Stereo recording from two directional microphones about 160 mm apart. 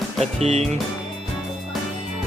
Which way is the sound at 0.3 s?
40° right (ahead or behind).